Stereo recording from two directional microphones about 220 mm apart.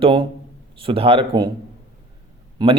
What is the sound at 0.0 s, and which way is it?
Speech, 20° right (ahead or behind).